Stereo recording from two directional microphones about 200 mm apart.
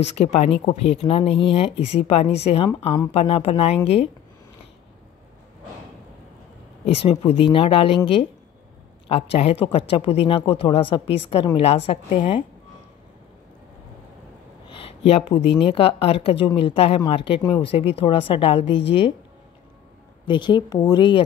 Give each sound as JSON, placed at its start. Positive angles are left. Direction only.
{"t": 0.0, "sound": "a woman's voice", "side_deg": 35}
{"t": 7.0, "sound": "speech", "side_deg": 30}
{"t": 14.7, "sound": "speech", "side_deg": 30}
{"t": 20.2, "sound": "speech", "side_deg": 20}